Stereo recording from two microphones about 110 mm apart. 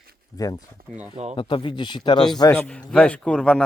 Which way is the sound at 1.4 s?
50° left (ahead or behind).